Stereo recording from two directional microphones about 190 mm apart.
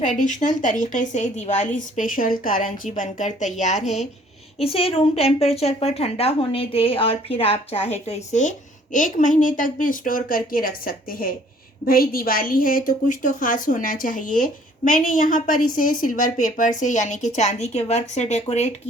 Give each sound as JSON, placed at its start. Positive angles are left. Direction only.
{"t": 0.0, "sound": "a woman's voice", "side_deg": 40}